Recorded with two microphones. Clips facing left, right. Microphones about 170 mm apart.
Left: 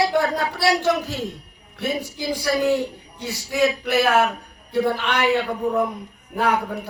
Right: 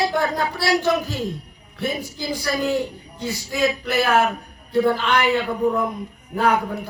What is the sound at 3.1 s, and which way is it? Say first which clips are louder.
A woman's voice: left 2 dB; 70° left (ahead or behind).